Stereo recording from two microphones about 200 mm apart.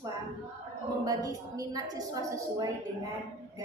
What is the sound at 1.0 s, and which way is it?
A woman's voice, 20° right (ahead or behind).